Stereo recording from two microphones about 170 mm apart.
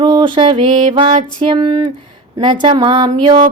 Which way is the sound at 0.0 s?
30° right (ahead or behind).